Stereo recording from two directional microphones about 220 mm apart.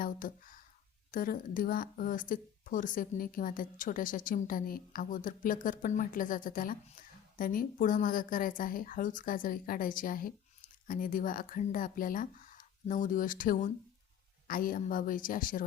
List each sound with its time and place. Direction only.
0.0 s a woman's voice: 40° left (ahead or behind)